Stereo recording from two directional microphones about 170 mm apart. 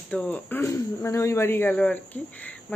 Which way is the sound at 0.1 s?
10° left (ahead or behind).